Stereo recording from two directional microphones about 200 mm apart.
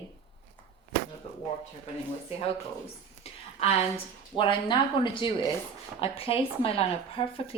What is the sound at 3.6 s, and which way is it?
Speech, 25° left (ahead or behind).